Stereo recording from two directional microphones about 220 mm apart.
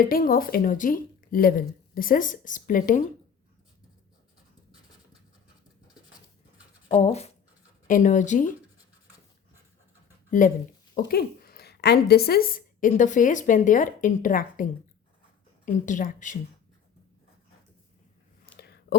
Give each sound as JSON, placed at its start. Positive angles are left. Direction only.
{"t": 0.0, "sound": "a woman's voice", "side_deg": 40}
{"t": 6.9, "sound": "a woman's voice", "side_deg": 30}
{"t": 10.4, "sound": "a woman's voice", "side_deg": 35}
{"t": 18.6, "sound": "a sound", "side_deg": 50}